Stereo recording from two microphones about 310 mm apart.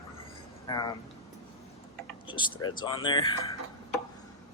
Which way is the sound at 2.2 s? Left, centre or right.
Centre.